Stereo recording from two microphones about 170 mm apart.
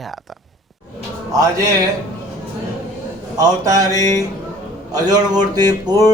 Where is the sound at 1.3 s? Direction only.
20° right (ahead or behind).